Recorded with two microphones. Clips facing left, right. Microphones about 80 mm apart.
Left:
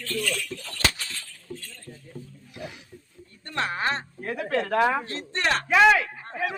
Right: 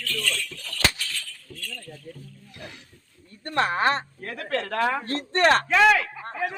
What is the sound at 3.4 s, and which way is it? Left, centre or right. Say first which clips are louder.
Speech: right 5 dB; right.